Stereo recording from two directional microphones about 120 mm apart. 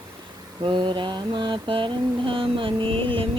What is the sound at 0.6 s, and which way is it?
Mantra, 40° right (ahead or behind).